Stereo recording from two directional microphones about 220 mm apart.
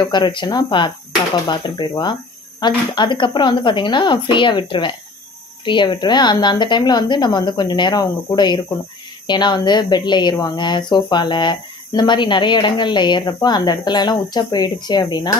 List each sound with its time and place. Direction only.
0.0 s speech: 20° left (ahead or behind)